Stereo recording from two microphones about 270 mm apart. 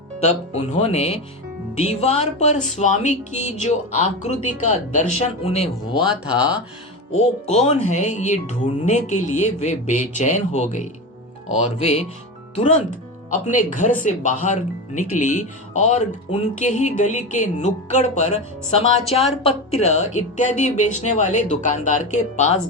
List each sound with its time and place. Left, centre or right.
0.2 s speech: left
6.1 s speech: centre
7.2 s speech: left